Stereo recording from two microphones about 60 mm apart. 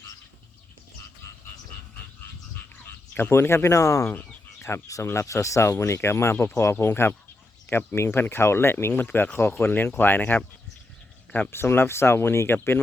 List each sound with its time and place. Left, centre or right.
3.2 s speech: left
11.5 s speech: left